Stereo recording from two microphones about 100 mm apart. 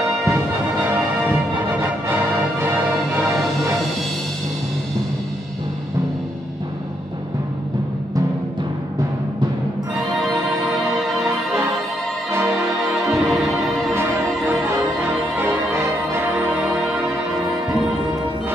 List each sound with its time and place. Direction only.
0.7 s music: 20° right (ahead or behind)
9.9 s music: centre (ahead or behind)
12.4 s music: centre (ahead or behind)
13.9 s music: 25° right (ahead or behind)
17.4 s music: 5° right (ahead or behind)